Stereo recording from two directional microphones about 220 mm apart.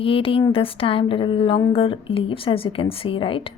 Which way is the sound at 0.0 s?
25° left (ahead or behind).